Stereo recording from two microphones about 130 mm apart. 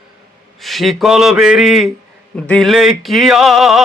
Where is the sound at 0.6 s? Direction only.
Centre (ahead or behind).